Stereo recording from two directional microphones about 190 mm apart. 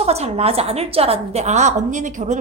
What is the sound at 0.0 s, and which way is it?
A woman's voice, 35° right (ahead or behind).